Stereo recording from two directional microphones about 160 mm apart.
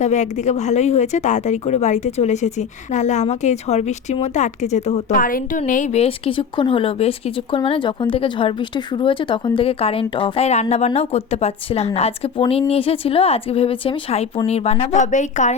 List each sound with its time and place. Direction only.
0.0 s a woman's voice: 45° left (ahead or behind)